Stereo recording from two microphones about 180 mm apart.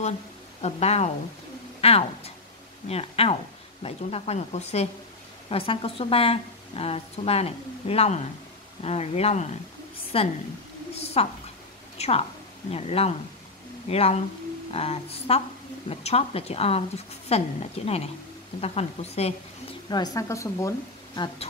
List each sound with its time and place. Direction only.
0.6 s a woman's voice: 35° left (ahead or behind)
19.9 s speech: 20° left (ahead or behind)